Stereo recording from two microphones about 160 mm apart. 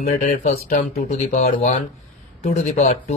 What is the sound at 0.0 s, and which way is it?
Speech, 50° left (ahead or behind).